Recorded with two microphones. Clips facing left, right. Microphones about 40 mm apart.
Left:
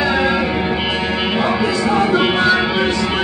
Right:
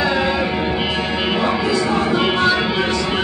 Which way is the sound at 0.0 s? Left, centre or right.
Centre.